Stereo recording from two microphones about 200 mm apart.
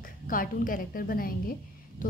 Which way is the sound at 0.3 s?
45° left (ahead or behind).